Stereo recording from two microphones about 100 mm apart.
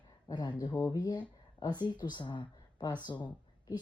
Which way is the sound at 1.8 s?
45° left (ahead or behind).